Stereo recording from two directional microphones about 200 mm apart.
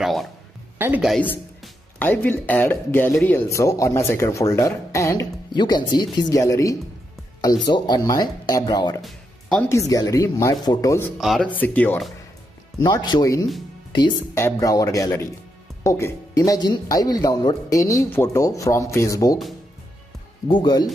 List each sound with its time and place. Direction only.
0.0 s speech: centre (ahead or behind)
1.6 s speech: 10° left (ahead or behind)
9.0 s music: centre (ahead or behind)
9.7 s speech: 15° left (ahead or behind)
11.1 s speech: centre (ahead or behind)
12.8 s speech: 20° left (ahead or behind)
20.4 s speech: 20° left (ahead or behind)